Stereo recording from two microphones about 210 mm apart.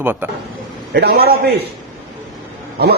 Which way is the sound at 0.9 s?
50° right (ahead or behind).